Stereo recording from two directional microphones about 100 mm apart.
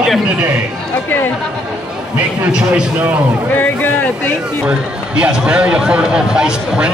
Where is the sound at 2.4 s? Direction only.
10° right (ahead or behind).